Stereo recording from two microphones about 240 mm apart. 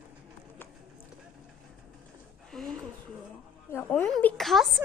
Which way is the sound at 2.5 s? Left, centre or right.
Centre.